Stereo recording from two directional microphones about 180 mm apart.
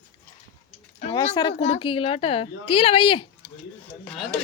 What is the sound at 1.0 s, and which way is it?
A child's voice, 35° left (ahead or behind).